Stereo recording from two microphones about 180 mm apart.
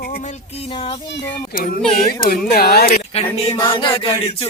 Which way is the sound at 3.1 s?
30° left (ahead or behind).